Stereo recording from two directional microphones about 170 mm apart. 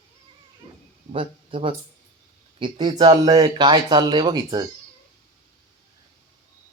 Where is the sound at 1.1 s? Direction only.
30° right (ahead or behind).